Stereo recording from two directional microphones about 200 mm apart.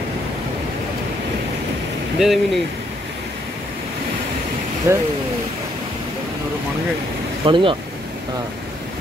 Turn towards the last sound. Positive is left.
turn(degrees=-25)  # may be behind; listen again after turning